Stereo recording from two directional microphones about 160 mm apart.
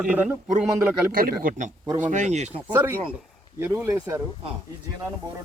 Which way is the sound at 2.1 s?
45° right (ahead or behind).